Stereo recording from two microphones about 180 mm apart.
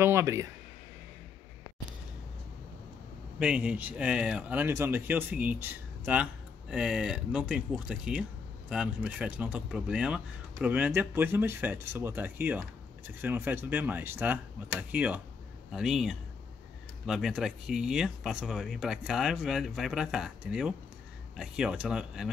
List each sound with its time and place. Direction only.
0.0 s speech: 15° right (ahead or behind)
3.3 s speech: 5° right (ahead or behind)